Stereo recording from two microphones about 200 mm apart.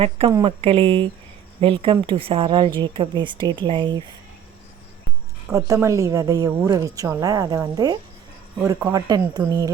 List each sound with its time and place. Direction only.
0.4 s speech: 25° right (ahead or behind)
5.5 s a woman's voice: 15° right (ahead or behind)